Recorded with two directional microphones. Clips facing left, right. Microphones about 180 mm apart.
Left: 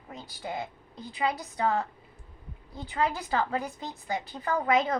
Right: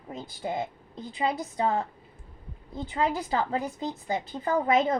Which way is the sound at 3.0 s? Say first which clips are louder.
Right 1 dB; 20° right (ahead or behind).